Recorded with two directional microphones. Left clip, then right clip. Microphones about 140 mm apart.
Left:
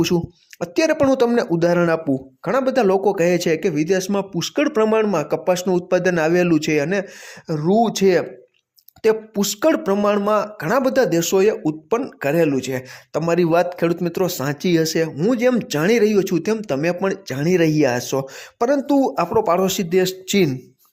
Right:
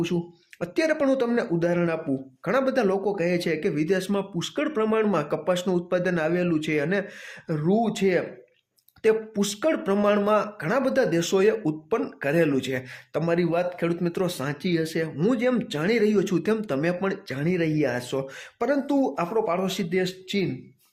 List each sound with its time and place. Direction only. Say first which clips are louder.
0.6 s speech: left 6 dB; 30° left (ahead or behind)
2.4 s speech: left 5 dB; 30° left (ahead or behind)
5.0 s speech: left 5 dB; 25° left (ahead or behind)
7.8 s speech: left 9 dB; 40° left (ahead or behind)
9.0 s speech: left 4 dB; 30° left (ahead or behind)
9.9 s speech: left 4 dB; 25° left (ahead or behind); by 15.1 s 40° left (ahead or behind)
15.2 s speech: left 4 dB; 30° left (ahead or behind)
16.1 s speech: left 5 dB; 25° left (ahead or behind); by 20.5 s 55° left (ahead or behind)